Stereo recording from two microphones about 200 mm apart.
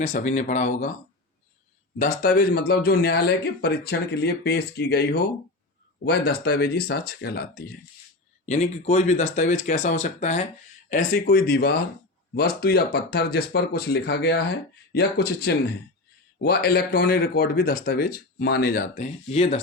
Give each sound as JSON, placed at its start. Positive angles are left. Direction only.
{"t": 0.0, "sound": "speech", "side_deg": 40}
{"t": 2.0, "sound": "speech", "side_deg": 45}
{"t": 8.4, "sound": "speech", "side_deg": 35}